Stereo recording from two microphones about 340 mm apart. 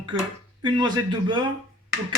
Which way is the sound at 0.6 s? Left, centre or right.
Centre.